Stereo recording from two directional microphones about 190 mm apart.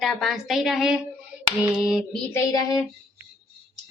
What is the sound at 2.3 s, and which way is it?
Child singing, 20° left (ahead or behind).